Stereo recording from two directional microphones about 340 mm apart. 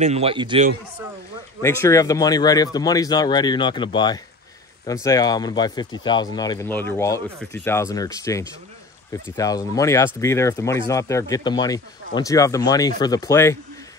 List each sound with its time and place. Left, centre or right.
0.0 s a man's voice: centre
1.6 s speech: centre